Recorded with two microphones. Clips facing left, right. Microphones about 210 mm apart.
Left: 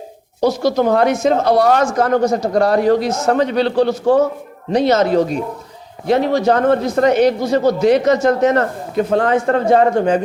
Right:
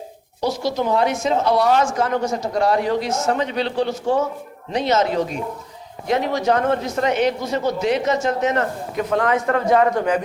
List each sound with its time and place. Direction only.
0.4 s speech: 45° left (ahead or behind)
1.5 s a man's voice: 45° left (ahead or behind)